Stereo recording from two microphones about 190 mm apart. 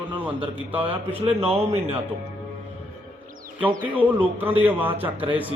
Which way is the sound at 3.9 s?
10° right (ahead or behind).